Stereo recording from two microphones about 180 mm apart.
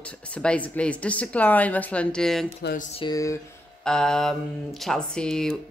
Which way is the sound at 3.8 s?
5° left (ahead or behind).